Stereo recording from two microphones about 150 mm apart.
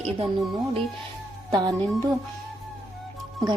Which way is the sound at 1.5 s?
25° right (ahead or behind).